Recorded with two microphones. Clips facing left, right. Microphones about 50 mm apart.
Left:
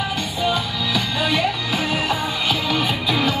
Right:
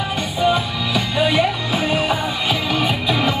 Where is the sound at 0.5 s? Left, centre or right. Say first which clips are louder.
Right 3 dB; centre.